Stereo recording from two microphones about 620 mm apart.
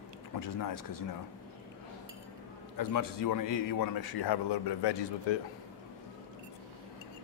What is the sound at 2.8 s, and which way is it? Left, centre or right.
A man's voice, left.